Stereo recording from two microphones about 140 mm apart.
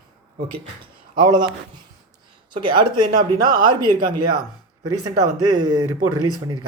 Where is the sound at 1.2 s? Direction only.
35° right (ahead or behind).